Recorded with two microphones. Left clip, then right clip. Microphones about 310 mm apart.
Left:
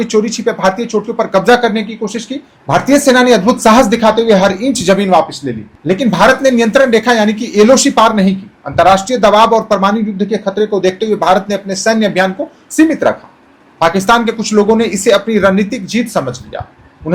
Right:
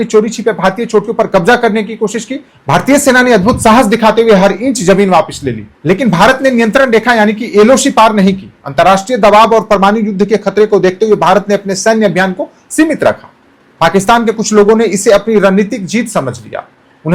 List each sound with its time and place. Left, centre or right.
0.0 s speech: right